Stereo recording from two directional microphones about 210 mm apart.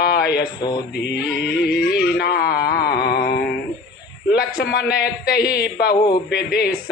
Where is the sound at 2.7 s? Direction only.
50° left (ahead or behind).